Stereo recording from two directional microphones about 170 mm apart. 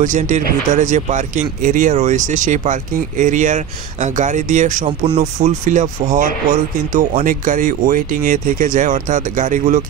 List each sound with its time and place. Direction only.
0.0 s speech: 45° right (ahead or behind)
4.8 s speech: 35° right (ahead or behind)